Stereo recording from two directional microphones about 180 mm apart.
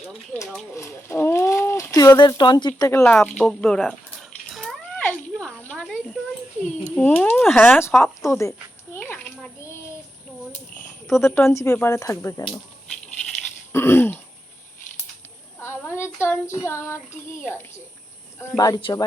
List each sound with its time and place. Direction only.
0.7 s speech: 15° left (ahead or behind)
3.0 s cat: 5° left (ahead or behind)
6.9 s child singing: 10° left (ahead or behind)
8.0 s a sound: 15° left (ahead or behind)
11.3 s child singing: 15° left (ahead or behind)
13.7 s throat clearing: 15° left (ahead or behind)
15.6 s a sound: 15° left (ahead or behind)
16.2 s child singing: 15° left (ahead or behind)
18.3 s speech: 20° left (ahead or behind)